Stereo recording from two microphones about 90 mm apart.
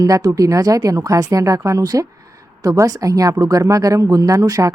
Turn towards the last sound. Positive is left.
turn(degrees=-40)  # may be behind; listen again after turning